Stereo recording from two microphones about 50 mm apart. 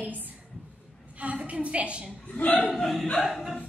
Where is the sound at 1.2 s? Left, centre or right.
Right.